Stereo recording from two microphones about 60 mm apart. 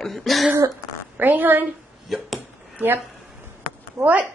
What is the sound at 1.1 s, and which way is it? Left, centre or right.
Speech, right.